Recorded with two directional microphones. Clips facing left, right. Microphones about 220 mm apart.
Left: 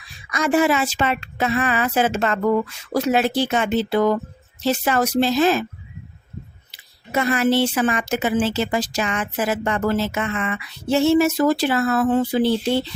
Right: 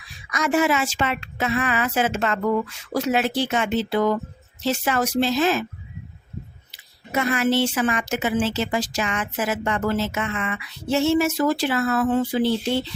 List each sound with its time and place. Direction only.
0.3 s a woman's voice: 30° left (ahead or behind)
7.2 s a woman's voice: 35° left (ahead or behind)